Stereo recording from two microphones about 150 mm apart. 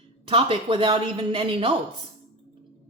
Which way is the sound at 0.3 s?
35° right (ahead or behind).